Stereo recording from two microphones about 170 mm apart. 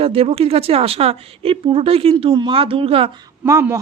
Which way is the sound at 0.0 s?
35° right (ahead or behind).